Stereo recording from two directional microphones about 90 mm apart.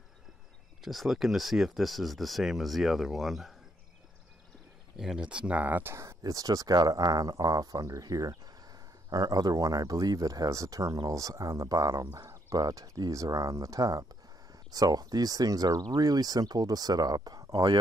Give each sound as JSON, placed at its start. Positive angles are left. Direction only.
{"t": 0.8, "sound": "speech", "side_deg": 0}
{"t": 4.9, "sound": "speech", "side_deg": -5}
{"t": 5.9, "sound": "speech", "side_deg": -35}